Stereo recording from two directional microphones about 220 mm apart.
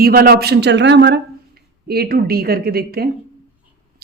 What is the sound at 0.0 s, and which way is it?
Speech, 45° right (ahead or behind).